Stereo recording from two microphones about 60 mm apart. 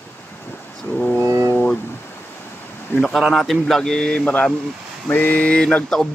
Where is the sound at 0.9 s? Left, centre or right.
Centre.